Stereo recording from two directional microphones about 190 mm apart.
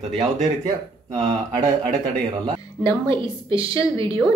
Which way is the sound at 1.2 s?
15° right (ahead or behind).